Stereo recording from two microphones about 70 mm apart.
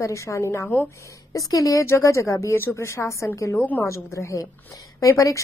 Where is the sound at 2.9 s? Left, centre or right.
Left.